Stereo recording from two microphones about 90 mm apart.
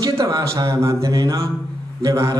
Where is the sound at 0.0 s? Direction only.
40° right (ahead or behind).